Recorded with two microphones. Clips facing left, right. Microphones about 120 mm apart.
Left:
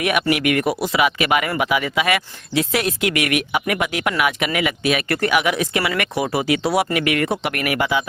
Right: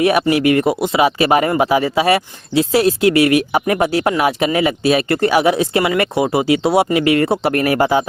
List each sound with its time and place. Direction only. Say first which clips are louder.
0.0 s speech: right 6 dB; 30° right (ahead or behind)